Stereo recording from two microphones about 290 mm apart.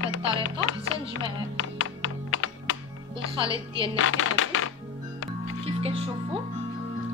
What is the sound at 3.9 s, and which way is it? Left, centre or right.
Speech, left.